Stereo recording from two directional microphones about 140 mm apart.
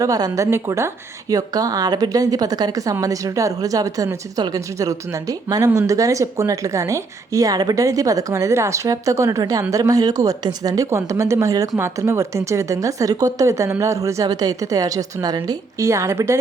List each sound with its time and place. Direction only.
0.0 s speech: 25° right (ahead or behind)